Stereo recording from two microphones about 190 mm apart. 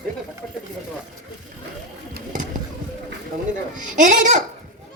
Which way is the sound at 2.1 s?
40° right (ahead or behind).